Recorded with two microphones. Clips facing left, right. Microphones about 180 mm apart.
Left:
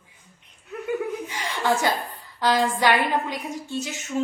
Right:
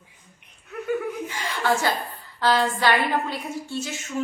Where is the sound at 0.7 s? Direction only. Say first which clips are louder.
Even; 15° left (ahead or behind).